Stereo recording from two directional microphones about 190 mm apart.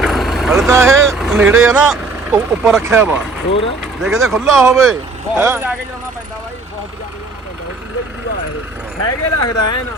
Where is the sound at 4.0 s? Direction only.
Centre (ahead or behind).